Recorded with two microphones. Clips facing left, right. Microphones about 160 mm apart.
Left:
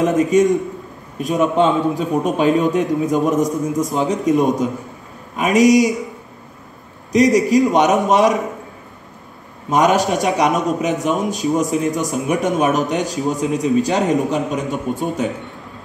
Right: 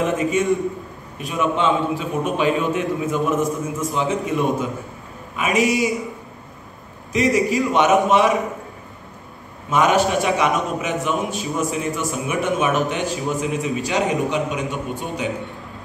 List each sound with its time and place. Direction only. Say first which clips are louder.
0.0 s a man's voice: left 6 dB; 40° left (ahead or behind)
7.1 s a man's voice: left 5 dB; 40° left (ahead or behind)
9.7 s a man's voice: left 2 dB; 40° left (ahead or behind)